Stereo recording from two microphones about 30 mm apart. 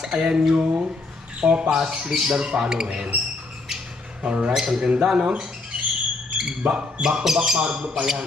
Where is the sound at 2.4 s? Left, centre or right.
Right.